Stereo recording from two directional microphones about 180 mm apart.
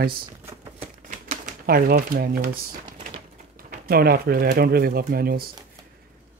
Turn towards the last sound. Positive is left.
turn(degrees=-55)  # may be behind; listen again after turning